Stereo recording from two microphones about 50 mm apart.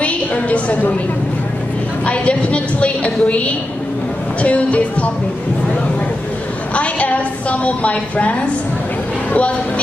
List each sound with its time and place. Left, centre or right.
0.0 s a woman's voice: left
2.0 s a woman's voice: left
6.7 s a woman's voice: left